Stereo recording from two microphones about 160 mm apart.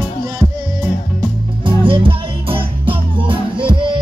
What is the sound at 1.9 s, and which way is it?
Music, 35° right (ahead or behind).